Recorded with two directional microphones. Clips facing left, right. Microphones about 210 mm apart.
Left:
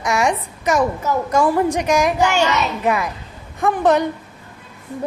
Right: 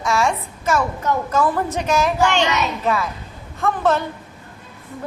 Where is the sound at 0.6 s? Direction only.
15° left (ahead or behind).